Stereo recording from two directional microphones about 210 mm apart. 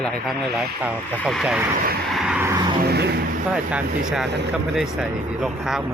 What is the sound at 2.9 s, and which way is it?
Vehicle, 50° right (ahead or behind).